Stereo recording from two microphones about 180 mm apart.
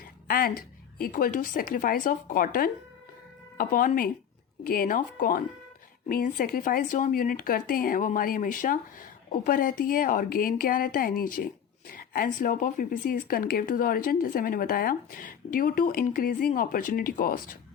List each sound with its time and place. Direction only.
0.3 s speech: 55° left (ahead or behind)